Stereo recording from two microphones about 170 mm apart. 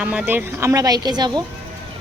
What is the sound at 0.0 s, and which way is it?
Speech, 5° right (ahead or behind).